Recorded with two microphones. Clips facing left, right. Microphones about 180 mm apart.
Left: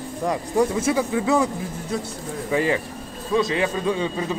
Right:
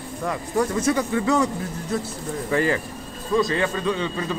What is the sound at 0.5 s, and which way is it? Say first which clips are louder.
Speech: left 1 dB; 10° left (ahead or behind).